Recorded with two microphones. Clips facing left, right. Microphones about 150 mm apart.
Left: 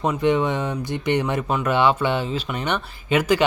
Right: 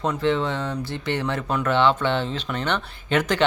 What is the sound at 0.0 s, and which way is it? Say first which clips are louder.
Speech: left 3 dB; 15° left (ahead or behind).